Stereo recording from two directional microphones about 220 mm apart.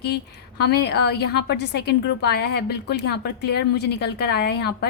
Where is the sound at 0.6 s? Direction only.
50° left (ahead or behind).